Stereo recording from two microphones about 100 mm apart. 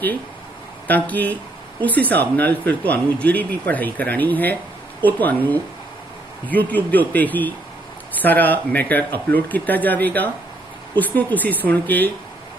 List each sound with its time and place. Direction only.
0.8 s speech: 15° left (ahead or behind)